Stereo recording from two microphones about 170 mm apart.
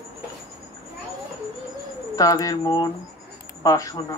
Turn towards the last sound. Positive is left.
turn(degrees=20)  # may be behind; listen again after turning